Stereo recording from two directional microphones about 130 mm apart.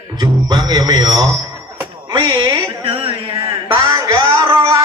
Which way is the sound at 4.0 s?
30° right (ahead or behind).